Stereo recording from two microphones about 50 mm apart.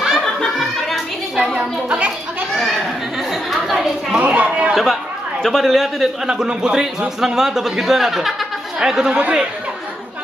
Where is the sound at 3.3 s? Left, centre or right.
Centre.